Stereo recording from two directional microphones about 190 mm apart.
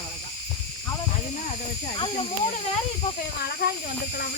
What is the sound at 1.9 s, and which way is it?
Speech, 25° left (ahead or behind).